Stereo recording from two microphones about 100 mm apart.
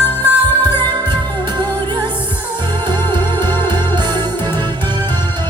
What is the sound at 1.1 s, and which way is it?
Music, 50° right (ahead or behind).